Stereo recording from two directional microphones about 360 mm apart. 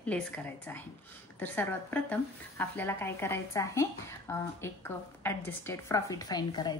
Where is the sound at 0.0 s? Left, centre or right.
Centre.